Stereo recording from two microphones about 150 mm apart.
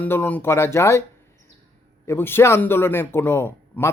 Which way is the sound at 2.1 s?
15° left (ahead or behind).